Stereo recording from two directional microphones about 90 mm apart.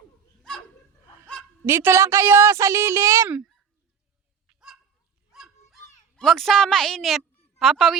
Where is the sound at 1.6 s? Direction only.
30° right (ahead or behind).